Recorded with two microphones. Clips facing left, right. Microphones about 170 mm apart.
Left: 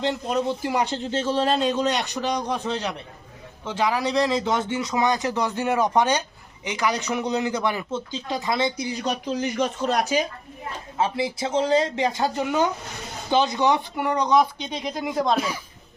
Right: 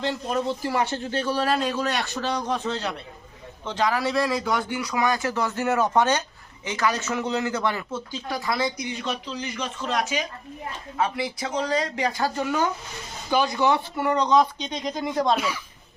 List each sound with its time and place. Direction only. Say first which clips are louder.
0.0 s speech: left 2 dB; 20° left (ahead or behind)